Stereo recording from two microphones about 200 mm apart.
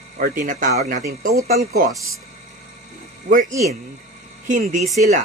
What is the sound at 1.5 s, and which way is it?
Speech, 50° right (ahead or behind).